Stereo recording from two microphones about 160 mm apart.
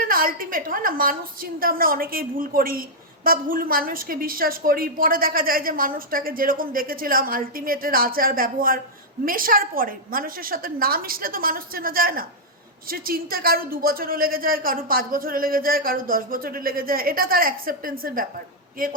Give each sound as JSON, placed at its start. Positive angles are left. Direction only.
{"t": 0.0, "sound": "a woman's voice", "side_deg": -65}